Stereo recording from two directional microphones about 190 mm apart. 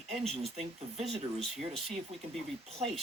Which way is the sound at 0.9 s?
35° right (ahead or behind).